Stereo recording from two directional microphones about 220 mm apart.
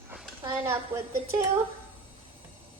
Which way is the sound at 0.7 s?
10° right (ahead or behind).